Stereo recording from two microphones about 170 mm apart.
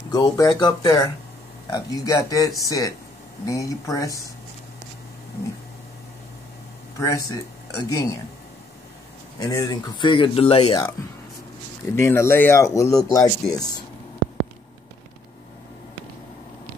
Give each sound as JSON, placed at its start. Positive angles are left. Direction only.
{"t": 0.1, "sound": "speech", "side_deg": 20}
{"t": 7.0, "sound": "speech", "side_deg": 20}
{"t": 9.4, "sound": "speech", "side_deg": 20}
{"t": 11.9, "sound": "speech", "side_deg": 15}